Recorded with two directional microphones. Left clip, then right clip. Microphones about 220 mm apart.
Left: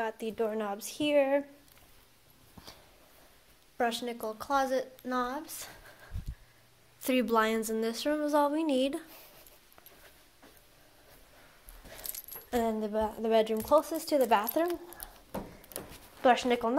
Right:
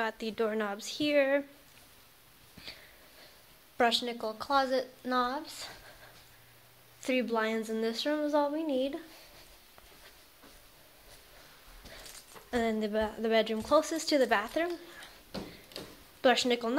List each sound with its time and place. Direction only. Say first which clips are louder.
0.0 s speech: even; 10° right (ahead or behind)
3.9 s speech: right 4 dB; 5° right (ahead or behind)
7.0 s speech: left 3 dB; 5° left (ahead or behind)
12.6 s speech: right 2 dB; 15° right (ahead or behind)
13.8 s speech: even; 15° right (ahead or behind)
14.3 s speech: left 2 dB; centre (ahead or behind)
16.2 s speech: left 1 dB; 20° right (ahead or behind)